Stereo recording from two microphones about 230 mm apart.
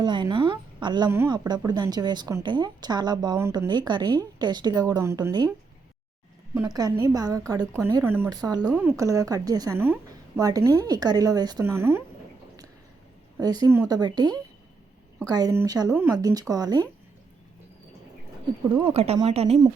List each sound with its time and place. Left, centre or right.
0.0 s a woman's voice: centre
6.5 s a woman's voice: centre
6.7 s a woman's voice: centre
13.4 s a woman's voice: centre
18.7 s speech: right